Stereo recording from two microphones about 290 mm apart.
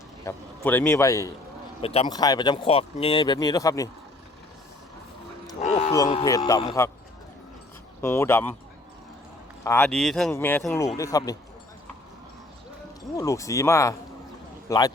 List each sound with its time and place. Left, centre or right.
0.3 s speech: centre
5.5 s dog: left
5.9 s speech: centre
8.0 s speech: centre
9.6 s speech: centre
13.1 s speech: centre